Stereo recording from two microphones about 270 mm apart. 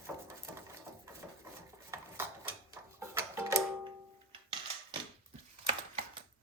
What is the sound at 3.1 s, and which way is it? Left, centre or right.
Music, centre.